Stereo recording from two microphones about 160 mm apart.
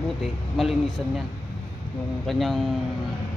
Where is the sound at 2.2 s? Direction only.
Centre (ahead or behind).